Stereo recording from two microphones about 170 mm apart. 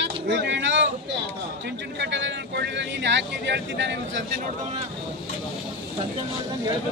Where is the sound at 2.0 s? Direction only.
90° right.